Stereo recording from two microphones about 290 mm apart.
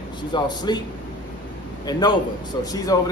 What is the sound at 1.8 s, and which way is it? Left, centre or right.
A man's voice, centre.